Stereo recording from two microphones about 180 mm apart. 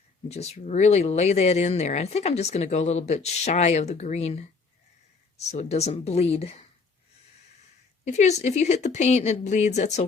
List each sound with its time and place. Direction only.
0.3 s speech: 35° left (ahead or behind)
8.0 s speech: 40° left (ahead or behind)